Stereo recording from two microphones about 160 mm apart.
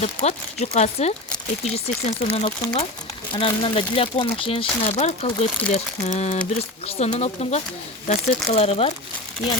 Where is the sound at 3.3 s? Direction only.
30° left (ahead or behind).